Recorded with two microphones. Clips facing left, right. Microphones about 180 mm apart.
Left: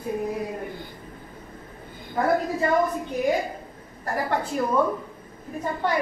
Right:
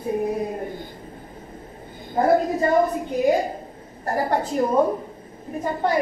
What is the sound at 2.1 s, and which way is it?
A woman's voice, 35° right (ahead or behind).